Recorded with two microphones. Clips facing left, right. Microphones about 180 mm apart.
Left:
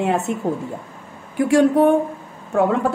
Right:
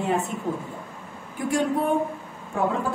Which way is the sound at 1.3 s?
75° left (ahead or behind).